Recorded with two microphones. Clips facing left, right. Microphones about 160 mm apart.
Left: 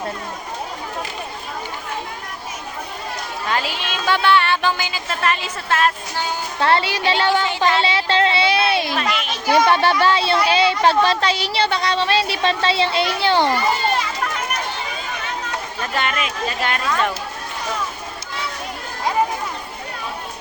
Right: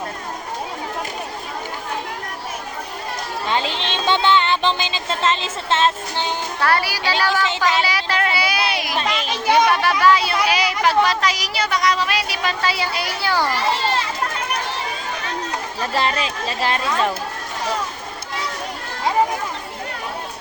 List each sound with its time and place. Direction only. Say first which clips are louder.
3.4 s music: right 1 dB; 25° right (ahead or behind)
6.6 s speech: left 3 dB; 25° left (ahead or behind)
9.0 s music: right 1 dB; 30° right (ahead or behind)
9.6 s speech: even; 30° left (ahead or behind)
15.8 s speech: right 2 dB; 30° right (ahead or behind)